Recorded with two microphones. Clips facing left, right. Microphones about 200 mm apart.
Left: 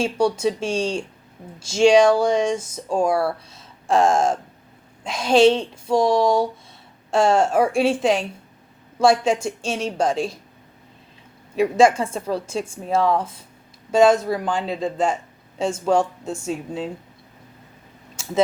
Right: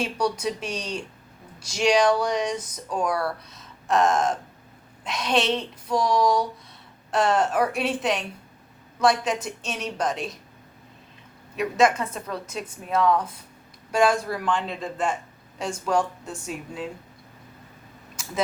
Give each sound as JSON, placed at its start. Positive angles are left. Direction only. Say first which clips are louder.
{"t": 0.0, "sound": "speech", "louder": "left 6 dB", "side_deg": 25}
{"t": 11.5, "sound": "speech", "louder": "left 5 dB", "side_deg": 30}
{"t": 14.4, "sound": "a man's voice", "louder": "left 3 dB", "side_deg": 35}
{"t": 18.2, "sound": "a sound", "louder": "left 7 dB", "side_deg": 25}